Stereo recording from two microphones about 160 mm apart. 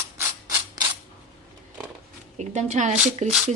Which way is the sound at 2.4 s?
45° right (ahead or behind).